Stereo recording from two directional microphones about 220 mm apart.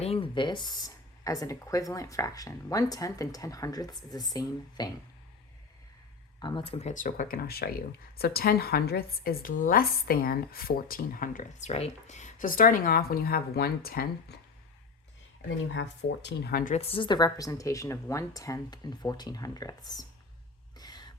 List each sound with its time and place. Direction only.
0.0 s speech: 25° left (ahead or behind)
6.4 s speech: 20° left (ahead or behind); by 14.3 s 45° left (ahead or behind)
15.4 s speech: 55° left (ahead or behind); by 20.1 s 15° left (ahead or behind)
20.7 s a sound: 20° left (ahead or behind)